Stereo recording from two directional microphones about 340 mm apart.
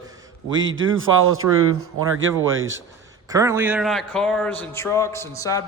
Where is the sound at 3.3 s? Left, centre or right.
Centre.